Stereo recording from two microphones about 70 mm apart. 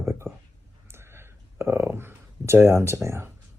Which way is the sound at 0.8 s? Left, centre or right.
Right.